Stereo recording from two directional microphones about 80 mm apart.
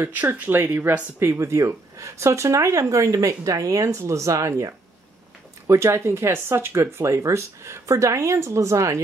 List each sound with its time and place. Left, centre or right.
0.0 s speech: right